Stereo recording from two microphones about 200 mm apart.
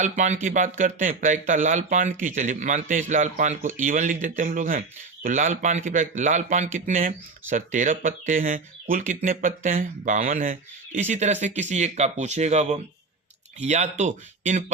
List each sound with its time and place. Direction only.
0.0 s speech: 35° right (ahead or behind)